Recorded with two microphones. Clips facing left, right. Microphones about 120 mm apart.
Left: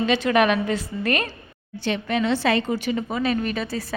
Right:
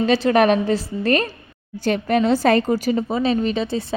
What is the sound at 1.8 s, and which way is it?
A woman's voice, 45° right (ahead or behind).